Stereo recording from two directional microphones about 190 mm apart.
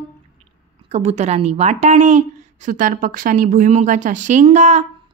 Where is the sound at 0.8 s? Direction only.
35° right (ahead or behind).